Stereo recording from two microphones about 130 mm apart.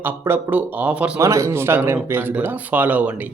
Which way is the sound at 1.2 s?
25° right (ahead or behind).